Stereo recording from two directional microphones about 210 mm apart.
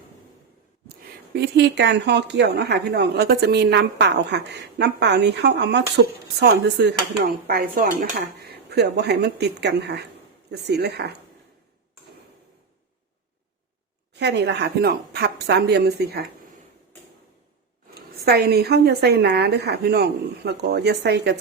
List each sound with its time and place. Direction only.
1.4 s a woman's voice: 55° right (ahead or behind)
8.4 s a woman's voice: 50° right (ahead or behind)
14.1 s a woman's voice: 55° right (ahead or behind)
18.3 s a woman's voice: 50° right (ahead or behind)